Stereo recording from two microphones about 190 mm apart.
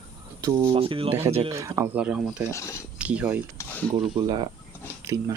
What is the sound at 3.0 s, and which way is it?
Speech, 5° right (ahead or behind).